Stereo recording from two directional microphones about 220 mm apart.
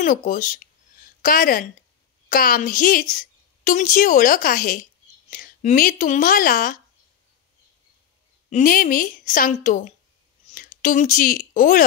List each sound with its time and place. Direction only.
0.0 s a woman's voice: 35° left (ahead or behind)
8.5 s speech: 35° left (ahead or behind)